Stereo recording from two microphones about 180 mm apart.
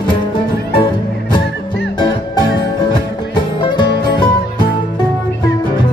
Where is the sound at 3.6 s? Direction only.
25° left (ahead or behind).